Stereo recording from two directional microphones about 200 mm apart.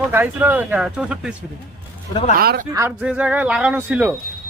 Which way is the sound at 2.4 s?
50° right (ahead or behind).